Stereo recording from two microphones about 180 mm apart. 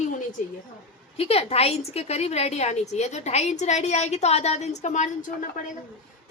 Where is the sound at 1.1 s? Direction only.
35° left (ahead or behind).